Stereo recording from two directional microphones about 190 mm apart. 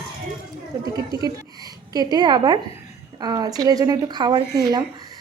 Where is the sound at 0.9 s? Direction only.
20° right (ahead or behind).